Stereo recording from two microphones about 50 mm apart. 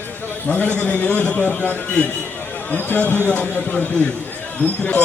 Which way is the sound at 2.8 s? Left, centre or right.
Left.